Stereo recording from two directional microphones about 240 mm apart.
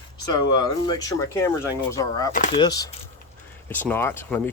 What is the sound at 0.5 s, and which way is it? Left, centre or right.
Speech, centre.